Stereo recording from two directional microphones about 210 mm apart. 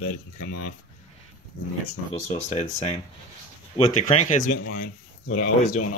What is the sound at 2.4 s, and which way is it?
Speech, 30° left (ahead or behind).